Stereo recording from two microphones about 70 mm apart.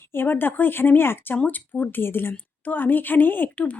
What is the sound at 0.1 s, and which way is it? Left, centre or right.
A woman's voice, left.